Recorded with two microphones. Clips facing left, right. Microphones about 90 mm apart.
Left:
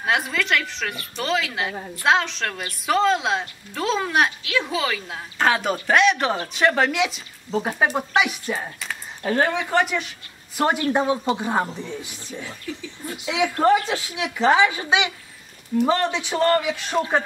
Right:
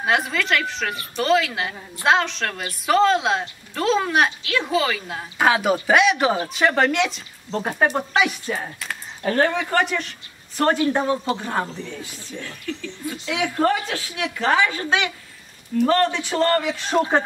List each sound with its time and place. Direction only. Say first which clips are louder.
0.0 s a woman's voice: right 2 dB; centre (ahead or behind)